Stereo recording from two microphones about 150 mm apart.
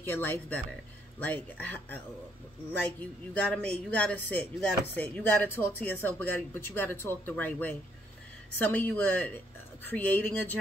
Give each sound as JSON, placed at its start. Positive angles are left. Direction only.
{"t": 0.0, "sound": "speech", "side_deg": 15}